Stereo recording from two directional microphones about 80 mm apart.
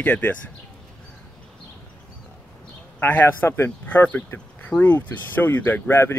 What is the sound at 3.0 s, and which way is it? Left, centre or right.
Speech, left.